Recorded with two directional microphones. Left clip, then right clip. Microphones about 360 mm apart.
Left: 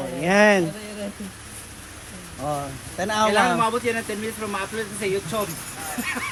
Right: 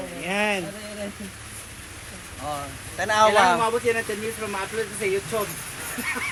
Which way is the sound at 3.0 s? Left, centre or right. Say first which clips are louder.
Right 2 dB; centre.